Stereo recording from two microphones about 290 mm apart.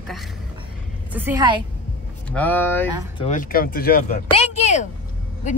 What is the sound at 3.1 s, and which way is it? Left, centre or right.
Speech, left.